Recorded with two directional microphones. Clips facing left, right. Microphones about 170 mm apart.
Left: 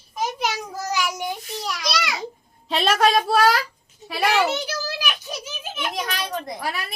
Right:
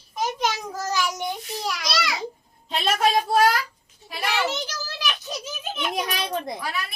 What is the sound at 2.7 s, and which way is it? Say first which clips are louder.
Speech: left 3 dB; 80° left.